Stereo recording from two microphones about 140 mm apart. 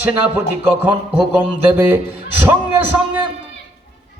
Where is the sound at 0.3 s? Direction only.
10° right (ahead or behind).